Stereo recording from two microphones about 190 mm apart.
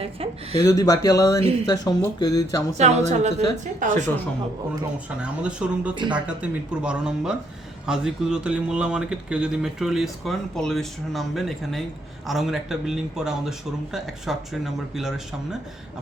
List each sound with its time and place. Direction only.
0.0 s a sound: 30° right (ahead or behind)
0.6 s speech: 20° left (ahead or behind)
1.4 s a woman's voice: 30° right (ahead or behind)
1.6 s speech: 20° left (ahead or behind)
2.7 s a woman's voice: 35° right (ahead or behind)
5.2 s speech: 5° right (ahead or behind)
5.9 s speech: 25° right (ahead or behind)
6.1 s speech: 5° right (ahead or behind)